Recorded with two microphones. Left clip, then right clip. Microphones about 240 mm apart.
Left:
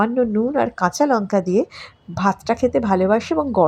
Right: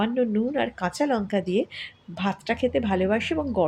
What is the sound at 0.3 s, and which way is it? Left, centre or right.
Speech, left.